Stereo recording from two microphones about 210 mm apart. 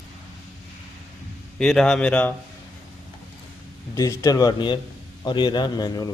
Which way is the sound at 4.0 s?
15° left (ahead or behind).